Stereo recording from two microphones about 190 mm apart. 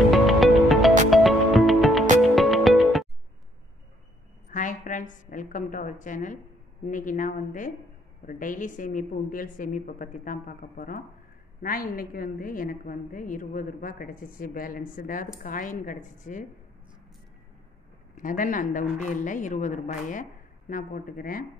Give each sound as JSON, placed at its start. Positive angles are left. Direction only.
{"t": 0.1, "sound": "music", "side_deg": 0}
{"t": 4.5, "sound": "a woman's voice", "side_deg": 45}
{"t": 18.1, "sound": "a woman's voice", "side_deg": 45}